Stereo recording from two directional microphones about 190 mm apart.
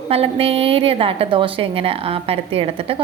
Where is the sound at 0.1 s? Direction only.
30° right (ahead or behind).